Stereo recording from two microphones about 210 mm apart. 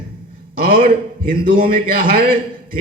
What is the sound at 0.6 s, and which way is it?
A man's voice, 45° right (ahead or behind).